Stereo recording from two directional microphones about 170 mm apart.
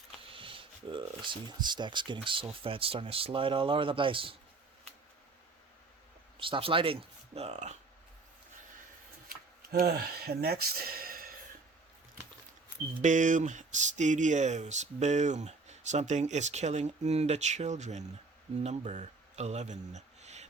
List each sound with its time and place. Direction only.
0.3 s speech: 30° right (ahead or behind)
6.4 s speech: 30° right (ahead or behind)
9.3 s speech: 60° right (ahead or behind)
13.0 s speech: 45° right (ahead or behind)